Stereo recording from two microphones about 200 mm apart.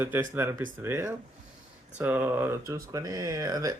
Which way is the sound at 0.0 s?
10° right (ahead or behind).